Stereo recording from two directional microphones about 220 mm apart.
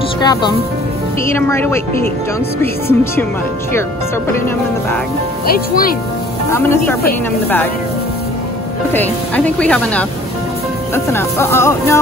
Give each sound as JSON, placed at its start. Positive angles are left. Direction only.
{"t": 0.2, "sound": "speech", "side_deg": 20}
{"t": 5.5, "sound": "speech", "side_deg": 40}
{"t": 6.5, "sound": "speech", "side_deg": 10}
{"t": 8.9, "sound": "speech", "side_deg": 5}
{"t": 11.1, "sound": "speech", "side_deg": 10}